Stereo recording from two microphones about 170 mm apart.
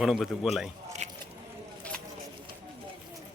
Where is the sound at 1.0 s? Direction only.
40° right (ahead or behind).